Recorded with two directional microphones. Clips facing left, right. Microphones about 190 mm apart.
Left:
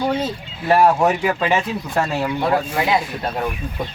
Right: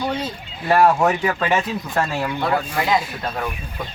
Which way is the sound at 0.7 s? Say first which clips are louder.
Left 1 dB; 15° left (ahead or behind).